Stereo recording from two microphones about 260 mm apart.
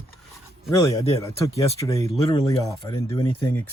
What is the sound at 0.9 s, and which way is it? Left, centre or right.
Speech, centre.